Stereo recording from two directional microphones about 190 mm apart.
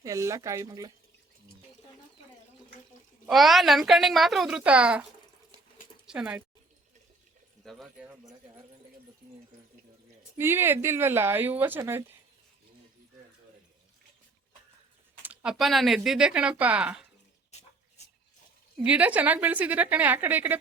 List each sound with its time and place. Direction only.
0.0 s speech: 15° right (ahead or behind)
3.2 s speech: centre (ahead or behind)
6.1 s speech: 5° right (ahead or behind)
7.6 s speech: centre (ahead or behind)
10.3 s speech: 10° right (ahead or behind)
15.2 s speech: 10° right (ahead or behind)
18.8 s speech: 10° right (ahead or behind)